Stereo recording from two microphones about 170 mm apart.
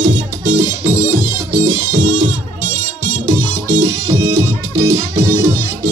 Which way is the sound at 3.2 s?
20° right (ahead or behind).